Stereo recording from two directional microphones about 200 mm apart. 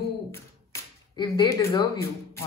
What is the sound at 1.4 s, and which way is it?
Speech, 15° left (ahead or behind).